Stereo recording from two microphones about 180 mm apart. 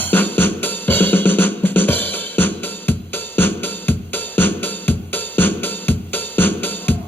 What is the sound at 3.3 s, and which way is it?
Music, 10° left (ahead or behind).